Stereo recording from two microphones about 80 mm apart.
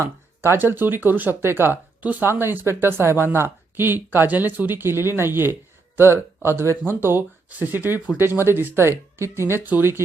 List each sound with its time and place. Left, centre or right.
0.6 s speech: right